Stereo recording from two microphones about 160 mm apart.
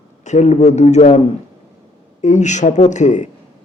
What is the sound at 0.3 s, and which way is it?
Speech, 45° left (ahead or behind).